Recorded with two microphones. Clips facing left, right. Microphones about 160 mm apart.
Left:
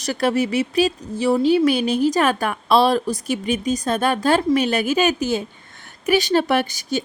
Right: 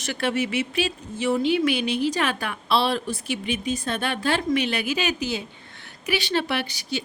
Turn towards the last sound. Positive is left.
turn(degrees=45)  # may be behind; listen again after turning